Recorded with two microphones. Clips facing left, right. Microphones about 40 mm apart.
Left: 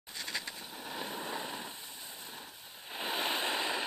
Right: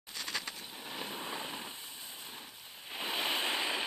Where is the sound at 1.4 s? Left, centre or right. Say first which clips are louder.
Left 1 dB; right.